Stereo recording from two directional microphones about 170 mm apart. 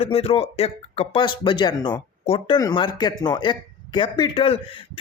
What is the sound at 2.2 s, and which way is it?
Speech, 35° left (ahead or behind).